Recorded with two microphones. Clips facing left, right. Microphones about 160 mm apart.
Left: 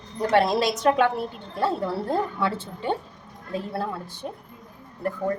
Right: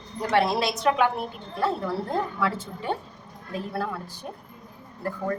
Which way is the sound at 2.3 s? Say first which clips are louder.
Left 1 dB; 30° left (ahead or behind).